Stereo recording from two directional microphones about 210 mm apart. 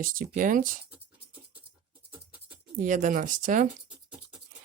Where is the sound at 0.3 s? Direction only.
40° right (ahead or behind).